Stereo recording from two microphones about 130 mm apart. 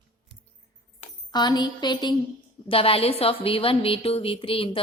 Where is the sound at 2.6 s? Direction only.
45° left (ahead or behind).